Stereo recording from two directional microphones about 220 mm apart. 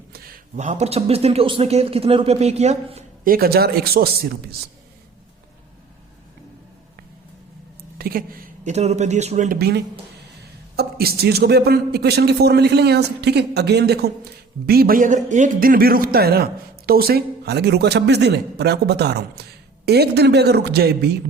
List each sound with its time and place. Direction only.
0.1 s speech: 40° right (ahead or behind)
7.9 s speech: 40° right (ahead or behind)
9.6 s a man's voice: 45° right (ahead or behind)